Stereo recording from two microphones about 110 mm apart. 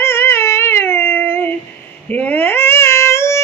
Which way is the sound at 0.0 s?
25° left (ahead or behind).